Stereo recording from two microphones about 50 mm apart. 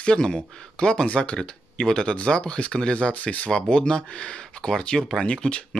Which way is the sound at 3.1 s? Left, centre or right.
Left.